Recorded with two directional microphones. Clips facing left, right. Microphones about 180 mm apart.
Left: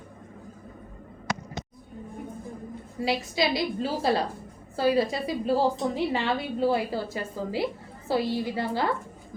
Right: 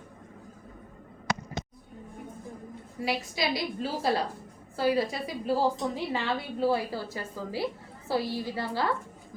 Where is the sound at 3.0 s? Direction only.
25° left (ahead or behind).